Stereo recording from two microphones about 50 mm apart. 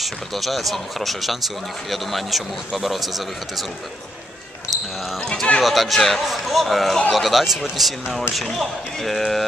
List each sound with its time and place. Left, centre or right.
0.0 s speech: centre
5.3 s speech: centre
5.6 s speech: centre